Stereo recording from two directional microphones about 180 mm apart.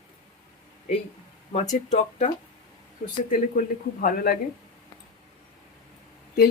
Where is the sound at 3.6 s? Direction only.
50° left (ahead or behind).